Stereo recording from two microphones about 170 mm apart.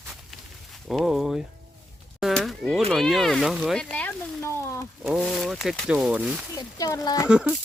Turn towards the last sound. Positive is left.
turn(degrees=-5)  # may be behind; listen again after turning